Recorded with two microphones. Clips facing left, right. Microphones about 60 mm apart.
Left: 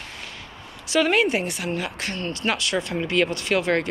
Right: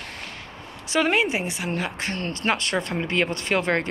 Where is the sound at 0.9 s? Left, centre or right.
Right.